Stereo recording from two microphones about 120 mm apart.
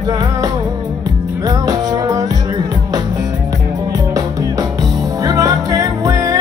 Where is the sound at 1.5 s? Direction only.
35° right (ahead or behind).